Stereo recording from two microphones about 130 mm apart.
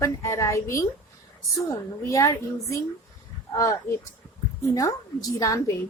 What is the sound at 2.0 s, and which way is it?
A woman's voice, 25° left (ahead or behind).